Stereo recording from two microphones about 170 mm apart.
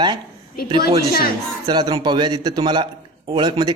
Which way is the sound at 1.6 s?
25° right (ahead or behind).